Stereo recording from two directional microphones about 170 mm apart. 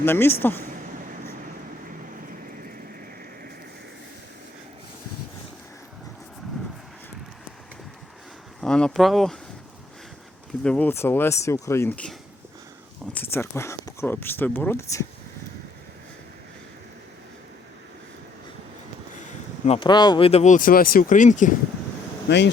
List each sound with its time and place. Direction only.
0.0 s speech: 15° left (ahead or behind)
8.6 s speech: 5° left (ahead or behind)
10.6 s speech: 5° left (ahead or behind)
13.1 s speech: 15° left (ahead or behind)
19.2 s a sound: 40° left (ahead or behind)
19.9 s speech: 25° left (ahead or behind); by 21.5 s 45° left (ahead or behind)
22.3 s speech: 90° left